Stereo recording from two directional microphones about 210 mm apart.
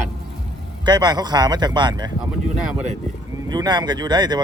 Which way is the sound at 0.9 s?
20° right (ahead or behind).